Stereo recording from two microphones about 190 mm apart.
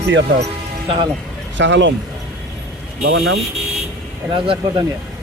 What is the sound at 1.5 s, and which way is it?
Speech, 75° right (ahead or behind).